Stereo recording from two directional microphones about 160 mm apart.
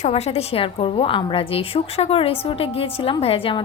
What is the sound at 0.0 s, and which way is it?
A woman's voice, 40° left (ahead or behind).